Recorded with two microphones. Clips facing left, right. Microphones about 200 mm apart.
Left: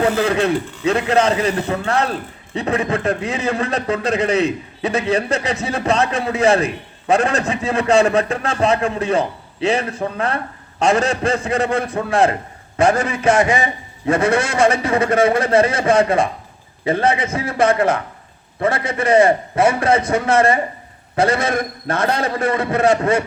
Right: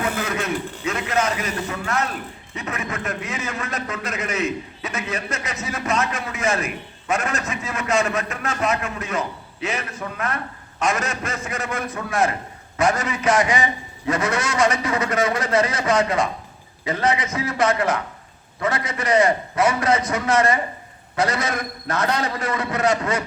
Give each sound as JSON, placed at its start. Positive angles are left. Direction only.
{"t": 0.0, "sound": "a man's voice", "side_deg": 30}